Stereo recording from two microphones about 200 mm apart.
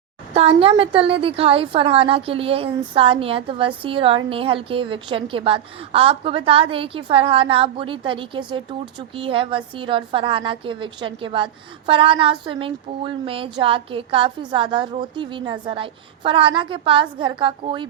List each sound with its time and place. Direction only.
0.3 s a woman's voice: 30° right (ahead or behind)